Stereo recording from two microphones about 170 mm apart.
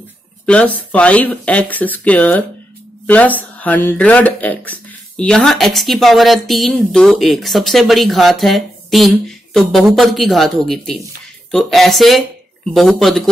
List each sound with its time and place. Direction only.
0.5 s speech: 10° left (ahead or behind)